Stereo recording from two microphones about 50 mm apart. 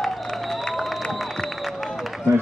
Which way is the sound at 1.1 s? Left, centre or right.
Centre.